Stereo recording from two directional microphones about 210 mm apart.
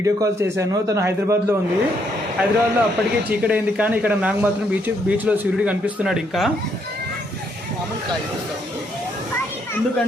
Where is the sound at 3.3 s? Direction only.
5° right (ahead or behind).